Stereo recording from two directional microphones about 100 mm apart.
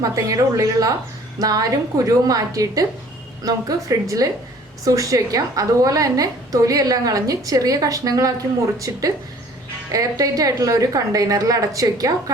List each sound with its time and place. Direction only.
0.0 s a woman's voice: 35° right (ahead or behind)
9.9 s a woman's voice: 35° right (ahead or behind)